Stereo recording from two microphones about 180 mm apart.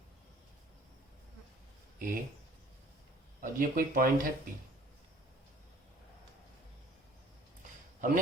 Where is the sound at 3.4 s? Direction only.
55° right (ahead or behind).